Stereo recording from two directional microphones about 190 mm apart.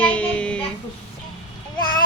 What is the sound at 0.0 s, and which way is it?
Child singing, 5° left (ahead or behind).